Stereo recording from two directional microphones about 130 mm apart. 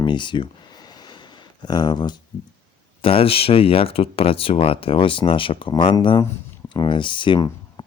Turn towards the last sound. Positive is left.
turn(degrees=30)  # may be behind; listen again after turning